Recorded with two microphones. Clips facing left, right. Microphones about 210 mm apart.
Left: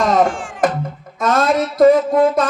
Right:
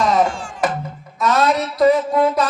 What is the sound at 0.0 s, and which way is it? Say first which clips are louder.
Music: left 2 dB; 50° left (ahead or behind).